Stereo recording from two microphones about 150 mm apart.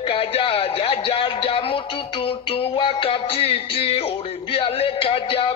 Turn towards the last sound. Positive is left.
turn(degrees=40)  # may be behind; listen again after turning